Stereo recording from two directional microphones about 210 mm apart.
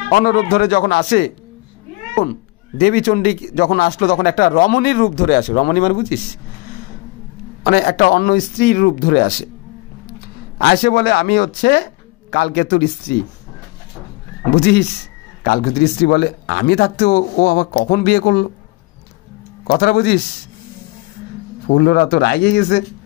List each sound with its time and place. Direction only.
0.1 s speech: 40° left (ahead or behind)
2.8 s speech: 45° left (ahead or behind)
7.6 s speech: 45° left (ahead or behind)
10.6 s speech: 50° left (ahead or behind)
14.6 s speech: 50° left (ahead or behind)
19.7 s speech: 50° left (ahead or behind)
21.6 s speech: 50° left (ahead or behind)